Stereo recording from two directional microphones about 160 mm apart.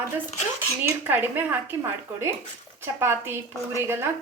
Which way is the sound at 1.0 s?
10° right (ahead or behind).